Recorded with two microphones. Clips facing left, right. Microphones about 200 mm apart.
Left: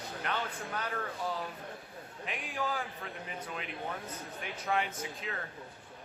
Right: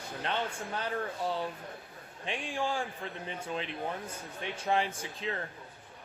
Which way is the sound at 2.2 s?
30° right (ahead or behind).